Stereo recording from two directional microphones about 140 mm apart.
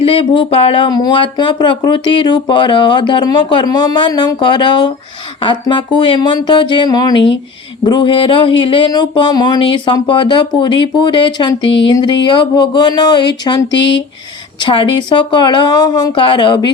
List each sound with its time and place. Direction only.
0.0 s speech: 40° left (ahead or behind)